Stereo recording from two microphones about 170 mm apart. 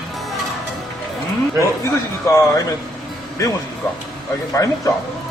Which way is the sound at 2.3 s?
20° left (ahead or behind).